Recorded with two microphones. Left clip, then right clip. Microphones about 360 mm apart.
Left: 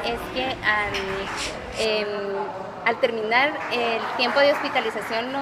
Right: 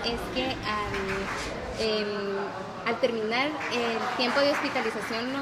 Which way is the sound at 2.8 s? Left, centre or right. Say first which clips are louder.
Left 5 dB; centre.